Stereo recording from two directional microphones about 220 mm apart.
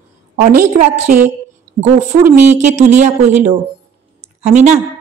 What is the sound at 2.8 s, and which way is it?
A woman's voice, 30° right (ahead or behind).